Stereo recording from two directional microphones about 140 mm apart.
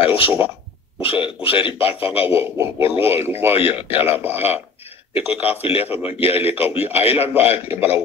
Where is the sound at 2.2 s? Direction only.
15° right (ahead or behind).